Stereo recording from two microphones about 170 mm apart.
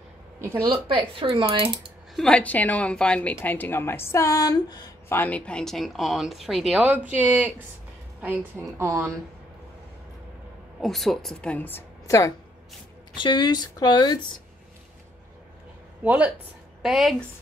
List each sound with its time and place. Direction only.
0.4 s speech: 15° right (ahead or behind)
0.7 s speech: 30° right (ahead or behind)
2.1 s a woman's voice: 5° left (ahead or behind); by 5.2 s 25° left (ahead or behind)
5.2 s a woman's voice: 5° left (ahead or behind); by 9.1 s 15° right (ahead or behind)
10.8 s a woman's voice: centre (ahead or behind); by 14.1 s 25° left (ahead or behind)
16.0 s a woman's voice: 10° right (ahead or behind)